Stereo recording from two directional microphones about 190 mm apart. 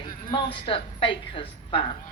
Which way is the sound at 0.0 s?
25° left (ahead or behind).